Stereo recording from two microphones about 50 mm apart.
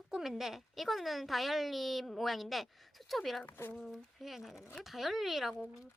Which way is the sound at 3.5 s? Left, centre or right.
Left.